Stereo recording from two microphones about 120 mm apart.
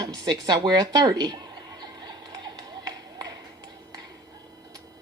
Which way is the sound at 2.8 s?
35° right (ahead or behind).